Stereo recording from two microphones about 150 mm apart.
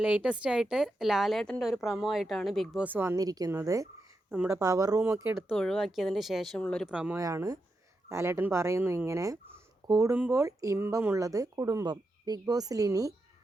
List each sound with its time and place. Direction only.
0.0 s a woman's voice: 10° right (ahead or behind)
2.8 s speech: 15° right (ahead or behind)
4.3 s speech: 5° right (ahead or behind)
4.6 s speech: 25° right (ahead or behind)
5.5 s a woman's voice: centre (ahead or behind)
6.8 s speech: 5° right (ahead or behind)
7.2 s speech: 20° right (ahead or behind)